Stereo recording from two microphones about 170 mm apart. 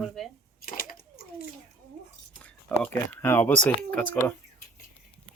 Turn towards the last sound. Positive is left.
turn(degrees=5)  # may be behind; listen again after turning